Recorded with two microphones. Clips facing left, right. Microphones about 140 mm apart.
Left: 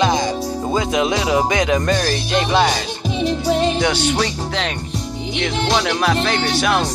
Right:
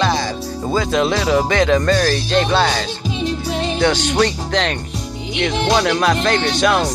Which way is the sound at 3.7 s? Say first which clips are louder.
Right 2 dB; 10° left (ahead or behind).